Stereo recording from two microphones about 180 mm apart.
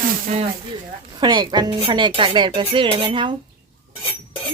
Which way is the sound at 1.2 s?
25° right (ahead or behind).